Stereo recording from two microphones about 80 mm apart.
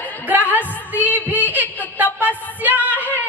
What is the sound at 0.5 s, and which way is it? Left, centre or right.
Music, left.